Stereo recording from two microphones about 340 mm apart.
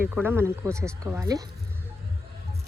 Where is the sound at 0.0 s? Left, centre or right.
Centre.